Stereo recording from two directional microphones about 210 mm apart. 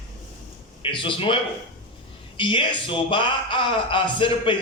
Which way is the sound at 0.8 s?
25° left (ahead or behind).